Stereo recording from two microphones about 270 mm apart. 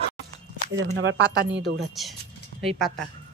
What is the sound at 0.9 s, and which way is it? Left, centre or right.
Speech, right.